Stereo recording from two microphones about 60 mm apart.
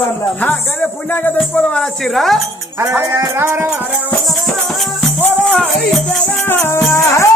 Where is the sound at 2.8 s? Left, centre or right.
Right.